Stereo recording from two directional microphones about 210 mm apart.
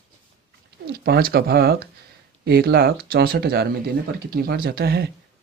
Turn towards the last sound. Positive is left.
turn(degrees=-50)  # may be behind; listen again after turning